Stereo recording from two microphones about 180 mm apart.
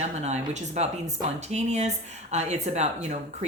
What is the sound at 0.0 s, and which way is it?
Speech, 40° right (ahead or behind).